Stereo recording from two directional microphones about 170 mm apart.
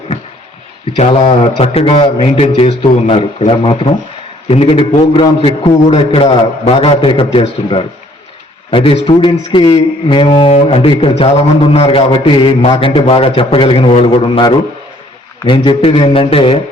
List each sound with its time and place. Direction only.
0.9 s a man's voice: 35° left (ahead or behind)